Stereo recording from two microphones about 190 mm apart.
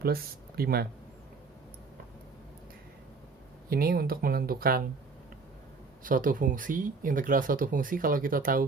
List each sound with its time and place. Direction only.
0.0 s speech: 55° right (ahead or behind)
3.7 s speech: 50° right (ahead or behind)
6.0 s speech: 45° right (ahead or behind)